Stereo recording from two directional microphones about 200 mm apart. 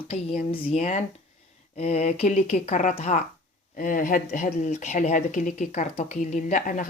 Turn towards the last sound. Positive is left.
turn(degrees=40)  # may be behind; listen again after turning